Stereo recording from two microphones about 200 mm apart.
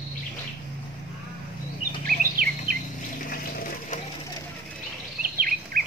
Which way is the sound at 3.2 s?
45° left (ahead or behind).